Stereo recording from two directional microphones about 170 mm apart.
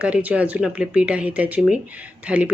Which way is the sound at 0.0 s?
10° right (ahead or behind).